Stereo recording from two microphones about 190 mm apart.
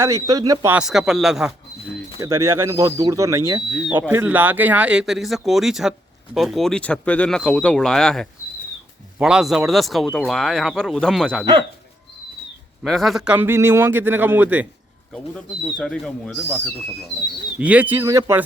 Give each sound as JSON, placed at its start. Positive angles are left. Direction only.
{"t": 0.0, "sound": "a man's voice", "side_deg": -20}
{"t": 0.8, "sound": "speech", "side_deg": 0}
{"t": 2.2, "sound": "a man's voice", "side_deg": -15}
{"t": 3.8, "sound": "a man's voice", "side_deg": 0}
{"t": 12.8, "sound": "a man's voice", "side_deg": 0}
{"t": 15.6, "sound": "speech", "side_deg": 0}
{"t": 17.6, "sound": "a man's voice", "side_deg": -5}